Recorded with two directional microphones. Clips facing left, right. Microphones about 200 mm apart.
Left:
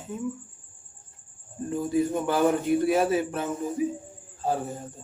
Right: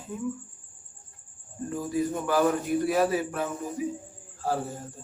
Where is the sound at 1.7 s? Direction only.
25° left (ahead or behind).